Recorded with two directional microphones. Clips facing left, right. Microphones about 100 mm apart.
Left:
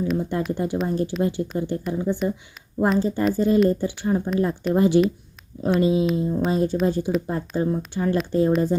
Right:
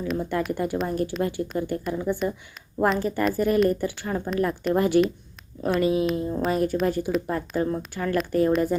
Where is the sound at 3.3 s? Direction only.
25° left (ahead or behind).